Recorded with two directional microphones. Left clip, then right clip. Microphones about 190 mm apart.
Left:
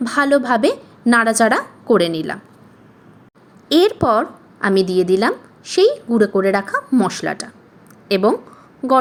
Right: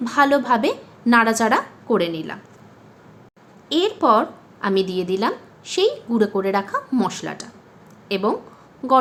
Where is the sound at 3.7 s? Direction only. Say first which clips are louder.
Left 3 dB; 35° left (ahead or behind).